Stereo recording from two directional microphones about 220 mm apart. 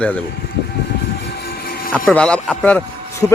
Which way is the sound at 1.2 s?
50° left (ahead or behind).